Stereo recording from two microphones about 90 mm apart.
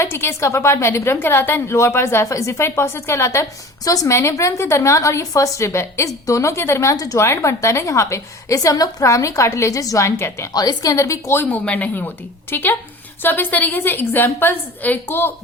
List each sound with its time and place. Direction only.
0.0 s a woman's voice: 30° left (ahead or behind)
10.5 s a woman's voice: 45° left (ahead or behind)
10.9 s a woman's voice: 35° left (ahead or behind)
11.4 s a woman's voice: 15° left (ahead or behind)